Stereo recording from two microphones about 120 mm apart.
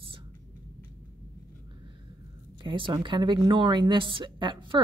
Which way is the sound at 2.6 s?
45° right (ahead or behind).